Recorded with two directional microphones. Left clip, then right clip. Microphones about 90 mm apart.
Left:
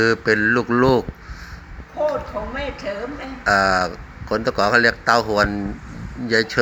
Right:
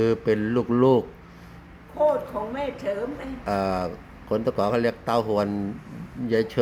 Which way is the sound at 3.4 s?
25° right (ahead or behind).